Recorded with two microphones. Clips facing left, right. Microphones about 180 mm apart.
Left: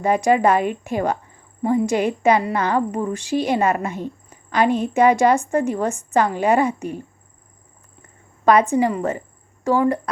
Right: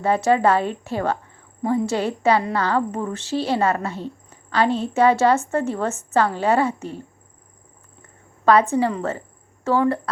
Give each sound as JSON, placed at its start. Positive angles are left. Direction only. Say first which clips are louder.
{"t": 0.0, "sound": "a woman's voice", "louder": "left 1 dB", "side_deg": 15}
{"t": 8.4, "sound": "a woman's voice", "louder": "left 1 dB", "side_deg": 15}